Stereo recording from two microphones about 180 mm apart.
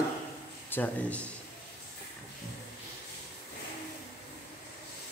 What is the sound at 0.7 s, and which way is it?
Speech, 10° left (ahead or behind).